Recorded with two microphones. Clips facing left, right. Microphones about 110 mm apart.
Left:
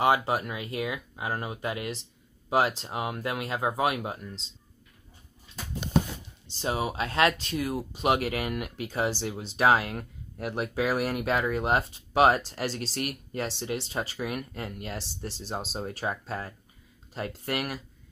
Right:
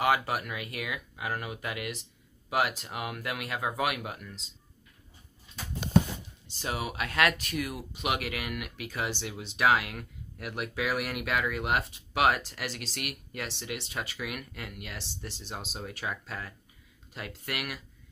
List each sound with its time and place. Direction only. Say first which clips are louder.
0.0 s speech: left 3 dB; 25° left (ahead or behind)
6.4 s speech: left 5 dB; 30° left (ahead or behind)